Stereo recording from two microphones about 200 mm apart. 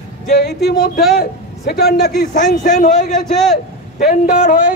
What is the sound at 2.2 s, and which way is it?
A man's voice, 40° left (ahead or behind).